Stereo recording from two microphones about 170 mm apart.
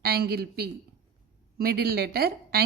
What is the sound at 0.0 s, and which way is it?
A man's voice, 65° right (ahead or behind).